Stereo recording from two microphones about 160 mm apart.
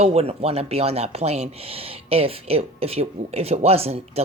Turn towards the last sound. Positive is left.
turn(degrees=-40)  # may be behind; listen again after turning